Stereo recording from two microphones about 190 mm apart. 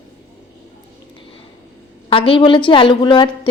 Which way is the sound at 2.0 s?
30° left (ahead or behind).